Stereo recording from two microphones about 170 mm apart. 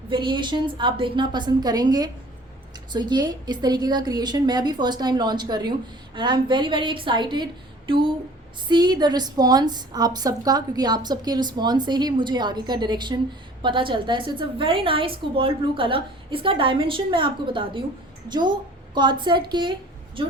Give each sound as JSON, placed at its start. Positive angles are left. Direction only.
{"t": 0.1, "sound": "a woman's voice", "side_deg": -30}
{"t": 8.7, "sound": "a woman's voice", "side_deg": -25}